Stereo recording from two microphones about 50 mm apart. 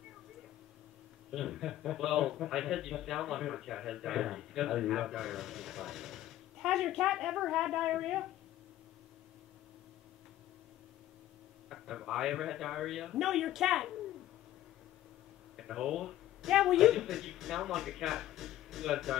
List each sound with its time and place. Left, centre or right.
1.3 s speech: centre
11.7 s speech: centre
15.5 s speech: centre